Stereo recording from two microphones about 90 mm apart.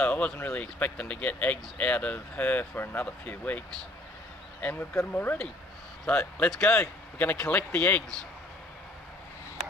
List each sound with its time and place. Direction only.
0.0 s speech: 15° left (ahead or behind)